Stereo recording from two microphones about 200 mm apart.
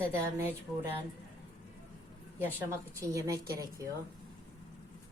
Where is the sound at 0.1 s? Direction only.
10° right (ahead or behind).